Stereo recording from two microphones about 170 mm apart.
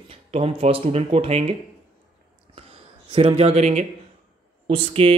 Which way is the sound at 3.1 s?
35° right (ahead or behind).